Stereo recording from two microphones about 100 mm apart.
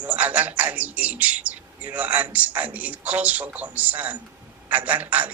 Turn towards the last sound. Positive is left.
turn(degrees=-15)  # may be behind; listen again after turning